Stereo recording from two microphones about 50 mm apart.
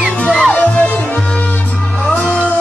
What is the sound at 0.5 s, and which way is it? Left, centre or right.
Music, left.